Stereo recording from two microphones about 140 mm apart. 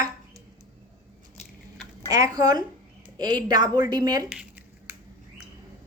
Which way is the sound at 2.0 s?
25° right (ahead or behind).